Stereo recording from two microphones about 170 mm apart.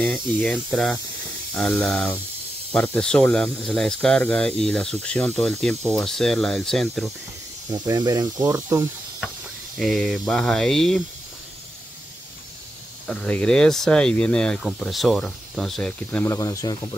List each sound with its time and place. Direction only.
0.0 s speech: 5° left (ahead or behind)
7.7 s speech: 20° right (ahead or behind)
9.8 s speech: centre (ahead or behind)
13.0 s speech: 5° left (ahead or behind)
16.3 s speech: 20° left (ahead or behind)